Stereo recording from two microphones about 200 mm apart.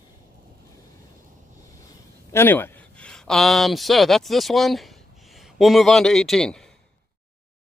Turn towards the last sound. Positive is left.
turn(degrees=0)  # may be behind; listen again after turning